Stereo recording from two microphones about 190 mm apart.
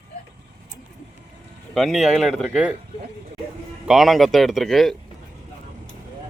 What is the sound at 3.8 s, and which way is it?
A man's voice, centre (ahead or behind).